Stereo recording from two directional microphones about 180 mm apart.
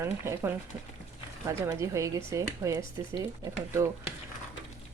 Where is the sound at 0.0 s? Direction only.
15° right (ahead or behind).